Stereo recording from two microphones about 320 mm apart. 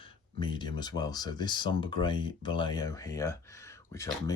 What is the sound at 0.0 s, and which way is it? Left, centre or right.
Speech, centre.